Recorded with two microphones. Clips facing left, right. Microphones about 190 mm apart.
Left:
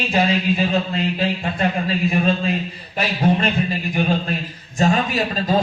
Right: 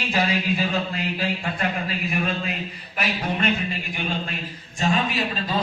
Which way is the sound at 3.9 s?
40° left (ahead or behind).